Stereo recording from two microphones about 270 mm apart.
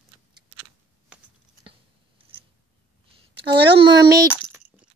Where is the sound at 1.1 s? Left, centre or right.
Centre.